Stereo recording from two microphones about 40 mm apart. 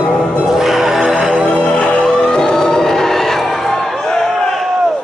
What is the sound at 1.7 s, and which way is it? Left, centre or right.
Music, left.